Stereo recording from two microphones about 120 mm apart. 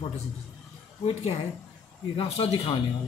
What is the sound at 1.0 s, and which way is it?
A woman's voice, 55° left (ahead or behind).